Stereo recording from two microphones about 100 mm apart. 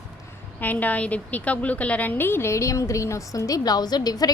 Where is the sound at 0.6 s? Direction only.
15° left (ahead or behind).